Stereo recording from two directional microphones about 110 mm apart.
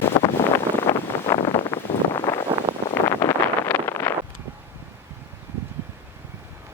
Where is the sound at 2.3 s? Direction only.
25° left (ahead or behind).